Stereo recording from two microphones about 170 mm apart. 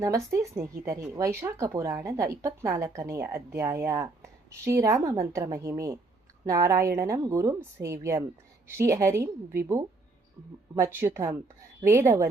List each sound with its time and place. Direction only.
0.0 s speech: 20° right (ahead or behind)